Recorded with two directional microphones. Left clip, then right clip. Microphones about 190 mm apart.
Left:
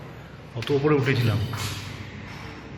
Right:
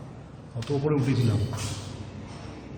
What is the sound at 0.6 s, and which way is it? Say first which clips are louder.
Speech: left 5 dB; centre (ahead or behind).